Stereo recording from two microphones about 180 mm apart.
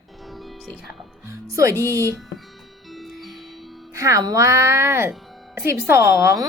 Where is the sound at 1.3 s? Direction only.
15° right (ahead or behind).